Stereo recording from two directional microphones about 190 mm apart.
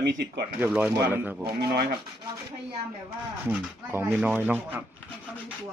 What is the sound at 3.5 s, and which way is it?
Speech, 10° right (ahead or behind).